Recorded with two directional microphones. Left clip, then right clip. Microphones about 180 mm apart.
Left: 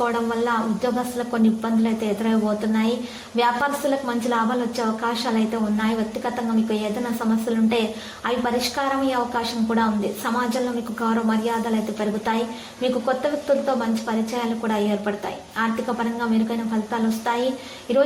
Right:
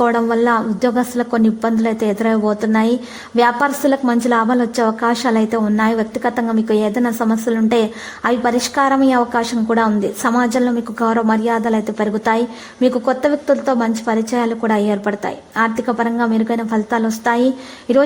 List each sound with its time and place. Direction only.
0.0 s a woman's voice: 40° right (ahead or behind)